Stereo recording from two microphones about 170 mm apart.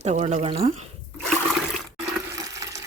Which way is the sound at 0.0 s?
40° right (ahead or behind).